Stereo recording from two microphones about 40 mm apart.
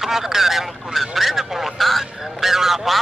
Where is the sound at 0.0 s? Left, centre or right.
Centre.